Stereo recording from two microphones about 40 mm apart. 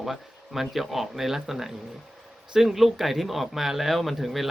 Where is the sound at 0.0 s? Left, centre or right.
Centre.